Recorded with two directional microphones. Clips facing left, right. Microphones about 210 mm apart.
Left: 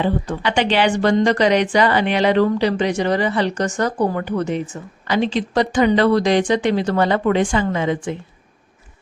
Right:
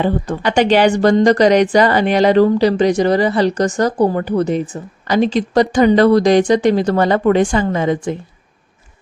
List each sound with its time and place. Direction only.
0.0 s speech: 45° right (ahead or behind)